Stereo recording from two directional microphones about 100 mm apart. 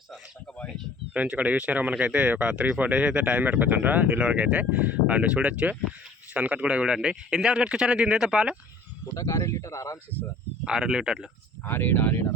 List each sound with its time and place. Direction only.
1.1 s speech: 15° right (ahead or behind)
9.1 s speech: 35° left (ahead or behind)
10.7 s speech: 5° right (ahead or behind)
11.6 s speech: 20° left (ahead or behind)